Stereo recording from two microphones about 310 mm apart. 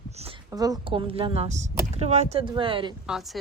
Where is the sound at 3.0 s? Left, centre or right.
Centre.